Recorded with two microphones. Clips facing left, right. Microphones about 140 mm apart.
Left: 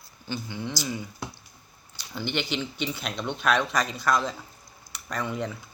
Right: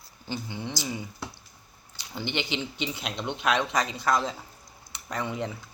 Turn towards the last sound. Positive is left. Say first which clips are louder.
# left 1 dB
turn(degrees=-25)  # may be behind; listen again after turning